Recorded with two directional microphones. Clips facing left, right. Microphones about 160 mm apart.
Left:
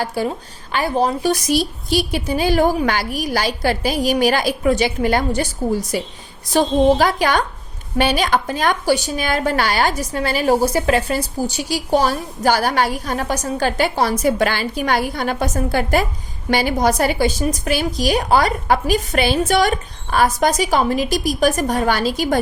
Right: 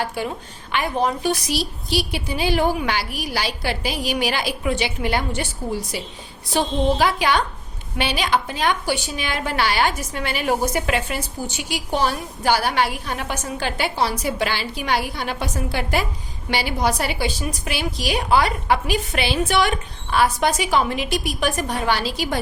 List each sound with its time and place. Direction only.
0.0 s a woman's voice: 40° left (ahead or behind)